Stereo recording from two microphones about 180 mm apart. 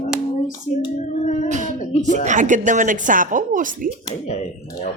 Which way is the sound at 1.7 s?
45° left (ahead or behind).